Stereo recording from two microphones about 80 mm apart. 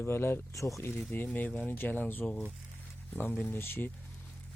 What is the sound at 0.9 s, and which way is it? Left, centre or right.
Speech, left.